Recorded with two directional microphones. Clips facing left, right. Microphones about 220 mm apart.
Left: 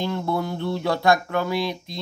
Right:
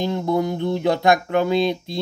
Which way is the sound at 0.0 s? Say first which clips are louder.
Right 4 dB; 20° right (ahead or behind).